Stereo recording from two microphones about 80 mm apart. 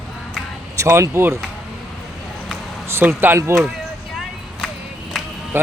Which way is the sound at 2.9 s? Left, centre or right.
Right.